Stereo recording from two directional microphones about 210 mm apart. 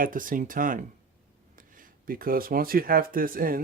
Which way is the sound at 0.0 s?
40° right (ahead or behind).